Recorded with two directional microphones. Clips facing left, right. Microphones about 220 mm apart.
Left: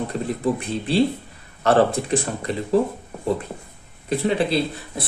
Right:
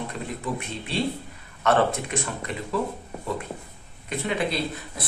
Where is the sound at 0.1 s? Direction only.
35° left (ahead or behind).